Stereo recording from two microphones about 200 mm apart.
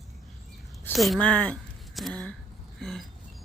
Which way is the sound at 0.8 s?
Centre (ahead or behind).